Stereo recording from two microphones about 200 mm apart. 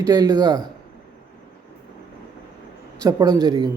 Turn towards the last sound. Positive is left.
turn(degrees=-20)  # may be behind; listen again after turning